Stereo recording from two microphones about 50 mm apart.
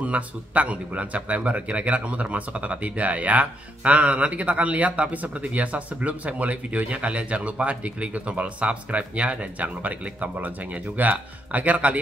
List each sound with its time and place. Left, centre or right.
0.0 s speech: right